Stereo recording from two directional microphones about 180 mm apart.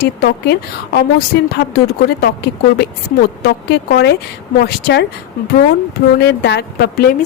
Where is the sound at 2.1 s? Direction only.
65° left (ahead or behind).